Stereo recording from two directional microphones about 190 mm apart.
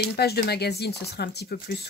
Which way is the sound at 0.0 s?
55° left (ahead or behind).